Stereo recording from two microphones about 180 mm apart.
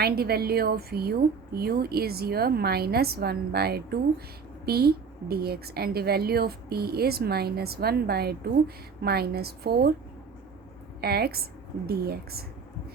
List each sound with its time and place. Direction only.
0.0 s a woman's voice: 60° right (ahead or behind)
11.0 s a woman's voice: 60° right (ahead or behind)